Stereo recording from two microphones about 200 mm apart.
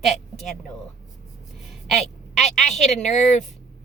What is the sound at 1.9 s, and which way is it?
Speech, centre (ahead or behind).